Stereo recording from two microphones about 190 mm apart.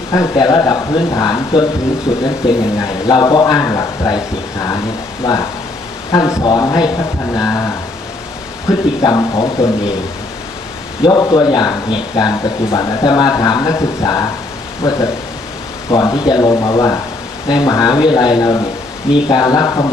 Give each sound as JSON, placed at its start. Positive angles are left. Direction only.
{"t": 0.1, "sound": "speech", "side_deg": 20}
{"t": 2.4, "sound": "speech", "side_deg": -5}
{"t": 3.1, "sound": "speech", "side_deg": 20}
{"t": 6.1, "sound": "speech", "side_deg": 20}
{"t": 11.1, "sound": "speech", "side_deg": 20}